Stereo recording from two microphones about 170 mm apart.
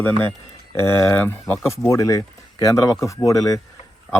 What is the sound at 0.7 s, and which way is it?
Speech, 15° left (ahead or behind).